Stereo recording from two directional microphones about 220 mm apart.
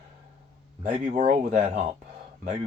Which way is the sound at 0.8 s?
35° right (ahead or behind).